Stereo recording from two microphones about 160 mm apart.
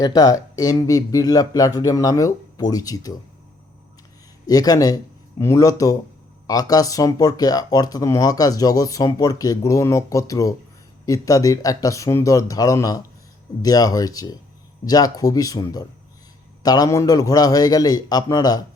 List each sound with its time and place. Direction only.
0.0 s speech: 25° left (ahead or behind)
4.4 s speech: 25° left (ahead or behind)